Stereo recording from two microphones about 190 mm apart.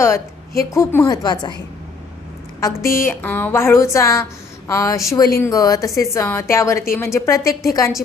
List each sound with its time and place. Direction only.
0.7 s a woman's voice: 15° left (ahead or behind)
2.6 s a woman's voice: 15° left (ahead or behind)